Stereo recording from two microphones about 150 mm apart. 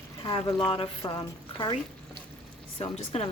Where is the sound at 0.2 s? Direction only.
30° left (ahead or behind).